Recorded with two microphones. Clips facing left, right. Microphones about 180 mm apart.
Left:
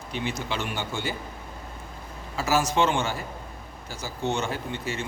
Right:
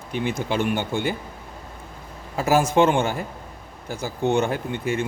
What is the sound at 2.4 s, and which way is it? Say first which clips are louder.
A man's voice: right 5 dB; 55° right (ahead or behind).